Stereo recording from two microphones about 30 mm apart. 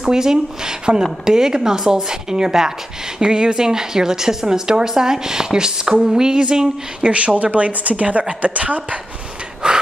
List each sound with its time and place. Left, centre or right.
0.0 s a woman's voice: centre
7.0 s a woman's voice: right
9.6 s gasp: right